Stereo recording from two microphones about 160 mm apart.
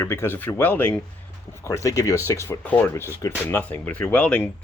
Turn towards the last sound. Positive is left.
turn(degrees=10)  # may be behind; listen again after turning